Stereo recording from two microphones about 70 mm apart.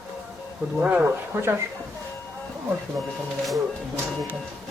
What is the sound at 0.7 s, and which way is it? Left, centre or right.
Speech, right.